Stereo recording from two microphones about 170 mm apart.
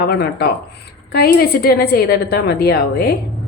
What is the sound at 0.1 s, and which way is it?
A woman's voice, 65° left (ahead or behind).